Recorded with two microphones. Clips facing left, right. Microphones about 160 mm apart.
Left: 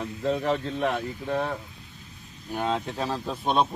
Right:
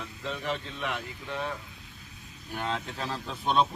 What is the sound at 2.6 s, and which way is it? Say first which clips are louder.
Speech: left 6 dB; 35° left (ahead or behind).